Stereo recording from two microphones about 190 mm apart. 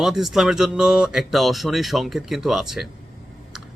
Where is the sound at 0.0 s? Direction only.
Centre (ahead or behind).